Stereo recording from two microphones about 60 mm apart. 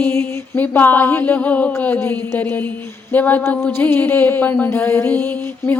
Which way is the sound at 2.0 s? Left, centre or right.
Left.